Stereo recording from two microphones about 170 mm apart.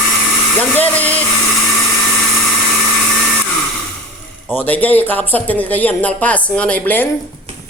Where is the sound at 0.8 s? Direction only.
10° left (ahead or behind).